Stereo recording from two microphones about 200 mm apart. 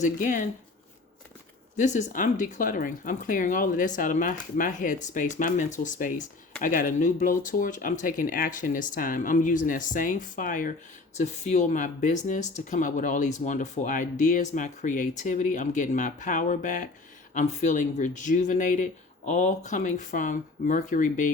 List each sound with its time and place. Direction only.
0.0 s speech: 40° left (ahead or behind)
1.7 s speech: 35° left (ahead or behind)